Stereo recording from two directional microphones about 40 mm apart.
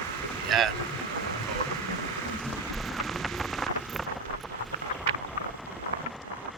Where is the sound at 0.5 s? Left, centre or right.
Centre.